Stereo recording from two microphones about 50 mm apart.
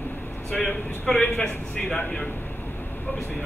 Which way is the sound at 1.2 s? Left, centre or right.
Left.